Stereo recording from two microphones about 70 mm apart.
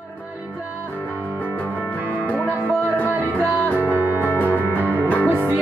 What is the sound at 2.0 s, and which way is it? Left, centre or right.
Music, right.